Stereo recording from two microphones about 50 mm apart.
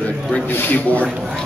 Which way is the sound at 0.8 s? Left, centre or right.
Left.